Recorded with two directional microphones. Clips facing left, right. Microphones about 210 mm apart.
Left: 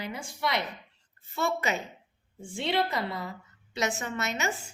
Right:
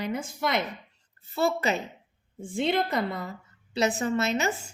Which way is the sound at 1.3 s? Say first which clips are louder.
Right 4 dB; 35° right (ahead or behind).